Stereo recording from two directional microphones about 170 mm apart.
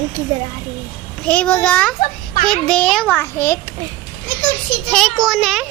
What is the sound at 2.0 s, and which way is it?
Speech, 50° left (ahead or behind).